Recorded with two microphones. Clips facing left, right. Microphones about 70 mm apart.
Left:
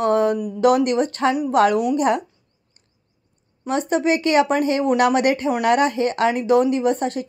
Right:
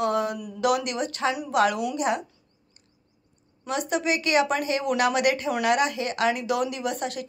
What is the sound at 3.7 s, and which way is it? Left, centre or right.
A woman's voice, left.